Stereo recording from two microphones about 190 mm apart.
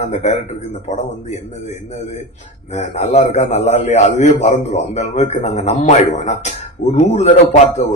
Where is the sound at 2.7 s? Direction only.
40° left (ahead or behind).